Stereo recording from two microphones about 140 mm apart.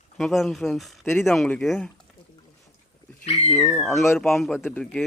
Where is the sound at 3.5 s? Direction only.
Centre (ahead or behind).